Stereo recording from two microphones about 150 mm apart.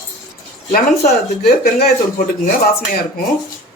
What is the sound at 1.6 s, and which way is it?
Speech, 90° left.